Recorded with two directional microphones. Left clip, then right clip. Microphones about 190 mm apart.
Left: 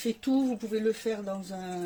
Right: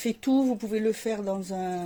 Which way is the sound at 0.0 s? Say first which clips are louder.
Right 3 dB; 40° right (ahead or behind).